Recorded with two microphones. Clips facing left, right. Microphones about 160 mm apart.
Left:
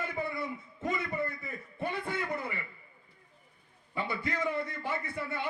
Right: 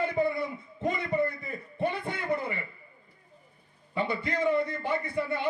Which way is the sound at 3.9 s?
25° right (ahead or behind).